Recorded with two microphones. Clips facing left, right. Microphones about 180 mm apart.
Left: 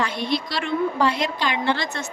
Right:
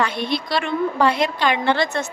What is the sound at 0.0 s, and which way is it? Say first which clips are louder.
A woman's voice: right 2 dB; 60° right (ahead or behind).